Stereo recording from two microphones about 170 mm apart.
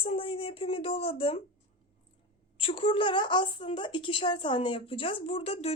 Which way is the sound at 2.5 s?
30° left (ahead or behind).